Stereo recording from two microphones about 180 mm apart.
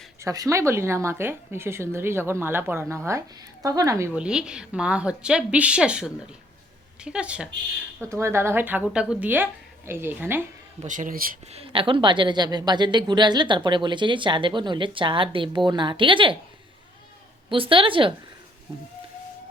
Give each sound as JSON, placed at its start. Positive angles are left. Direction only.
{"t": 0.2, "sound": "a woman's voice", "side_deg": -20}
{"t": 10.8, "sound": "speech", "side_deg": -45}
{"t": 11.5, "sound": "a woman's voice", "side_deg": -30}
{"t": 17.5, "sound": "a woman's voice", "side_deg": -30}